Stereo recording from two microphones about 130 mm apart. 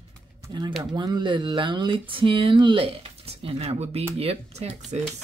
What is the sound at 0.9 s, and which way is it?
Speech, 35° right (ahead or behind).